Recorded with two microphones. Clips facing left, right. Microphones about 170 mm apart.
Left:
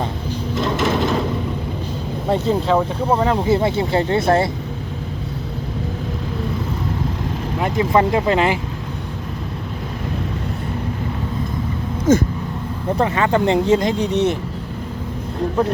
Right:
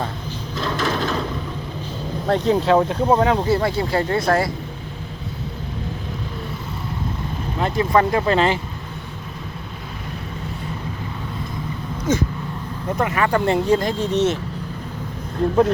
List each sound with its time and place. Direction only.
0.5 s a sound: 20° left (ahead or behind)
2.2 s speech: 5° left (ahead or behind)
2.7 s speech: 10° right (ahead or behind)
3.3 s speech: 20° left (ahead or behind)
7.6 s speech: 20° left (ahead or behind)
13.0 s speech: 25° left (ahead or behind)